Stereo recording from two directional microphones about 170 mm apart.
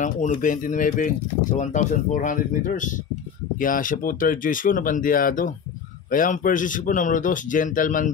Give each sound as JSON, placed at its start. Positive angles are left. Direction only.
{"t": 0.0, "sound": "speech", "side_deg": 50}